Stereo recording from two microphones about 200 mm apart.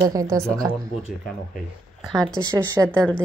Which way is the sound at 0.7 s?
5° left (ahead or behind).